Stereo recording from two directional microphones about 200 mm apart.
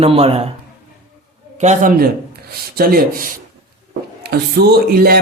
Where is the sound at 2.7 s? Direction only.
50° right (ahead or behind).